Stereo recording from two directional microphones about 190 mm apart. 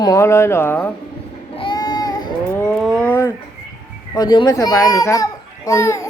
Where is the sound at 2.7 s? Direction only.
Centre (ahead or behind).